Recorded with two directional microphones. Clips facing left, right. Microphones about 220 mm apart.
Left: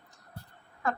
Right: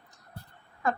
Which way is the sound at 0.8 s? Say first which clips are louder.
Right 2 dB; 15° right (ahead or behind).